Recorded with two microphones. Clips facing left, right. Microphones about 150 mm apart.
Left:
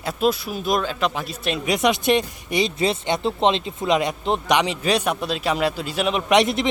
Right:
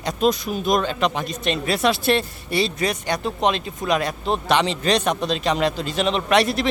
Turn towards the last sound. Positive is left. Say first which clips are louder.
# left 1 dB
turn(degrees=20)  # may be behind; listen again after turning